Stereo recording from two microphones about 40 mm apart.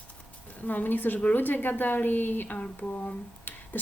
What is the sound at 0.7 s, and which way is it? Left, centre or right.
Speech, left.